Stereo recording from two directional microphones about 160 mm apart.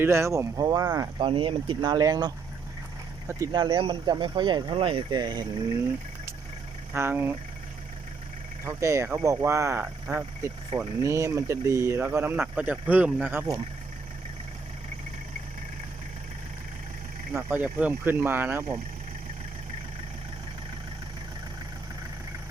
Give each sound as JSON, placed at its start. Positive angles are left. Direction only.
{"t": 0.0, "sound": "speech", "side_deg": -15}
{"t": 6.9, "sound": "speech", "side_deg": -15}
{"t": 8.6, "sound": "speech", "side_deg": -15}
{"t": 17.3, "sound": "speech", "side_deg": -10}